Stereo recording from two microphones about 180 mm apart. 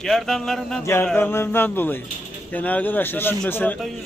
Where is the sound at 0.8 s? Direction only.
15° left (ahead or behind).